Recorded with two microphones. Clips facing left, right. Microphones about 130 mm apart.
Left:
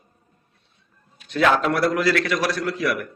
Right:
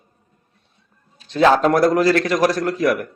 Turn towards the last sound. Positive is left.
turn(degrees=-40)  # may be behind; listen again after turning